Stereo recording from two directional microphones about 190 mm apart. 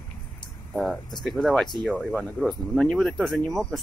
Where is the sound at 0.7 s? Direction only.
Centre (ahead or behind).